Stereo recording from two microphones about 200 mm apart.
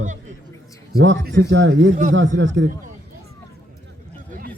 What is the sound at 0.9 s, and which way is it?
A man's voice, 50° right (ahead or behind).